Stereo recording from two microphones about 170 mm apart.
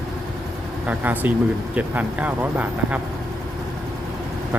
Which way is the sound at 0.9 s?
10° right (ahead or behind).